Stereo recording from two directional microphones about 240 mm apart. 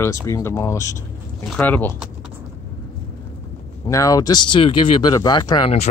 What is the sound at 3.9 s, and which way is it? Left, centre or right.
Speech, centre.